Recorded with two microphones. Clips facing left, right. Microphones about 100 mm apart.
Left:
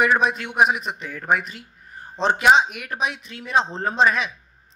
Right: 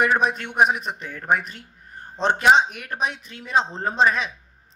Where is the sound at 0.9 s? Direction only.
35° right (ahead or behind).